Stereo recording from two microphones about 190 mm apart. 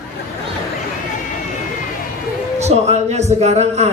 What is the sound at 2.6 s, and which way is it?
A man's voice, 35° right (ahead or behind).